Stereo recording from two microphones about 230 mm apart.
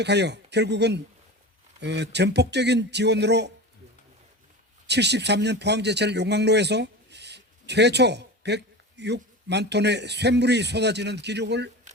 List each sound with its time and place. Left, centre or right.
0.0 s speech: right
4.9 s a man's voice: right